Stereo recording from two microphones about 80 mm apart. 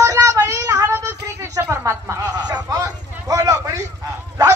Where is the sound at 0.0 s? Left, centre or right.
Right.